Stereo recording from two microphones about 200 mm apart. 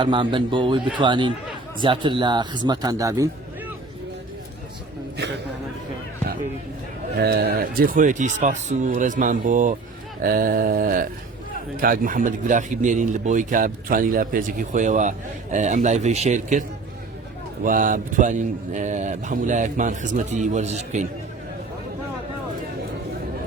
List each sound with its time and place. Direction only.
0.0 s speech: 25° right (ahead or behind)
7.2 s speech: 55° right (ahead or behind)
10.2 s a sound: 45° right (ahead or behind)
11.8 s speech: 45° right (ahead or behind)